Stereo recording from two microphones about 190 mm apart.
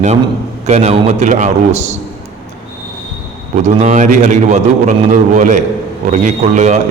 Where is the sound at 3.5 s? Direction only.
35° right (ahead or behind).